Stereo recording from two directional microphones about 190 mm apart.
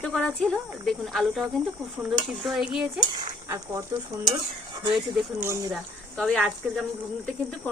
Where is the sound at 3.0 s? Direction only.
20° right (ahead or behind).